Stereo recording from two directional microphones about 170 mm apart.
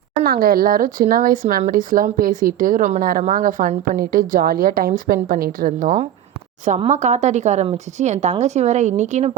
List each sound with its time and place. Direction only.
0.3 s a woman's voice: 60° right (ahead or behind)
6.7 s a woman's voice: 35° right (ahead or behind)
6.9 s a woman's voice: 45° right (ahead or behind)